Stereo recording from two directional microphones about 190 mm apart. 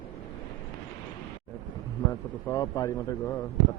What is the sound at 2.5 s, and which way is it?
Speech, 15° left (ahead or behind).